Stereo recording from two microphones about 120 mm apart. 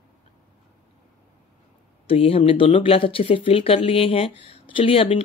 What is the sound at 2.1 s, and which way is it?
Speech, 55° left (ahead or behind).